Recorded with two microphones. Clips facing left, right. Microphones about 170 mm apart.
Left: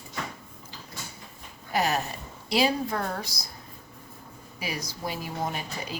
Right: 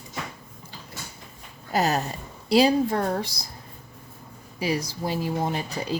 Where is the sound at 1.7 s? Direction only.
35° right (ahead or behind).